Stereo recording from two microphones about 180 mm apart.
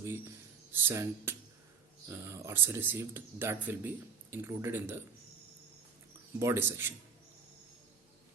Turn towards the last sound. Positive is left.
turn(degrees=-15)  # may be behind; listen again after turning